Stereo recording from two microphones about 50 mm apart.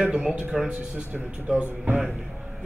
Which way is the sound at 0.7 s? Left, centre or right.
Right.